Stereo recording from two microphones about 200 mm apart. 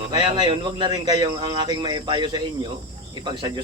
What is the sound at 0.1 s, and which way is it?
Speech, 20° right (ahead or behind).